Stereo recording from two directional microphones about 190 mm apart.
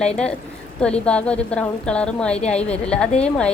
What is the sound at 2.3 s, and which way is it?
Speech, 35° left (ahead or behind).